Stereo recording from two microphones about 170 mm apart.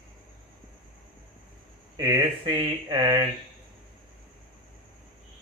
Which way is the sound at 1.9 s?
20° right (ahead or behind).